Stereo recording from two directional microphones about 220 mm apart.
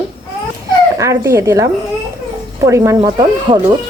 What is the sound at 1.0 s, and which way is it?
Speech, 15° right (ahead or behind).